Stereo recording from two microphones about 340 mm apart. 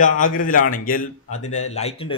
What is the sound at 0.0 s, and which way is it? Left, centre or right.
A man's voice, left.